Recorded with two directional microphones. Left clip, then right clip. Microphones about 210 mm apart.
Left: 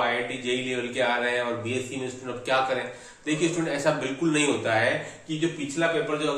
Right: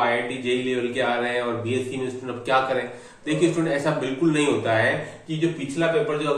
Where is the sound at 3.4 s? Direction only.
25° left (ahead or behind).